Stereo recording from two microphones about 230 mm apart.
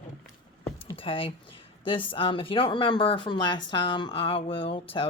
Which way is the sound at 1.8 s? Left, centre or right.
Left.